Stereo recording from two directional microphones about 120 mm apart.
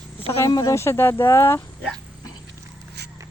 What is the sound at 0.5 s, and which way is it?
Speech, 30° left (ahead or behind).